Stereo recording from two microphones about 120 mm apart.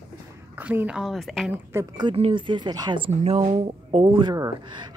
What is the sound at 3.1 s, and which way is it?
Speech, 55° right (ahead or behind).